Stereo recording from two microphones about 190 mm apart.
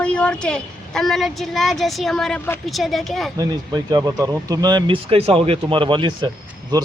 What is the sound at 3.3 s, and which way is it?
Speech, 20° right (ahead or behind).